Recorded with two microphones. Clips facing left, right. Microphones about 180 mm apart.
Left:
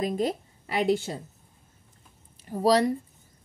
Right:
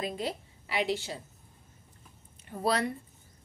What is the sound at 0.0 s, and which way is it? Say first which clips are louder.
Speech: left 7 dB; 45° left (ahead or behind).